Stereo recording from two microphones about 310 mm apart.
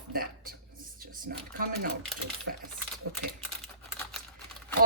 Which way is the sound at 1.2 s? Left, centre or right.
Right.